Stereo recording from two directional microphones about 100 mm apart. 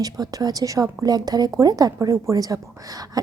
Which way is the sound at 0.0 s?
40° right (ahead or behind).